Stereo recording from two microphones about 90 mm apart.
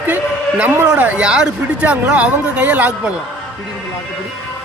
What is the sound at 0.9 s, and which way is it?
Speech, 15° right (ahead or behind).